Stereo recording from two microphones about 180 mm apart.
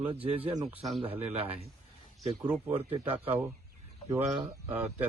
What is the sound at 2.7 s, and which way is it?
Speech, 30° right (ahead or behind).